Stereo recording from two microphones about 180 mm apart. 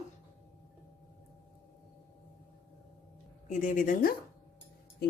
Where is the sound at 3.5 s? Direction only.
45° left (ahead or behind).